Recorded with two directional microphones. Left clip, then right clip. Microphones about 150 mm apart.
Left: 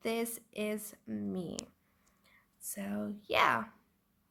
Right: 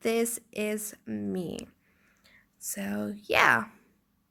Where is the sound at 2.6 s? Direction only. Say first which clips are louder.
Right 6 dB; 30° right (ahead or behind).